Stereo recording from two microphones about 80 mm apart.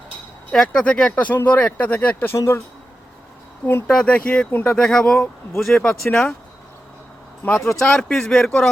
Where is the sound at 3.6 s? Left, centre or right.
Left.